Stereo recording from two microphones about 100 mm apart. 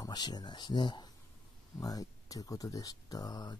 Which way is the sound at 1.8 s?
35° left (ahead or behind).